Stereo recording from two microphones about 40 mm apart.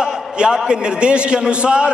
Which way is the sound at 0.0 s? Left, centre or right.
Centre.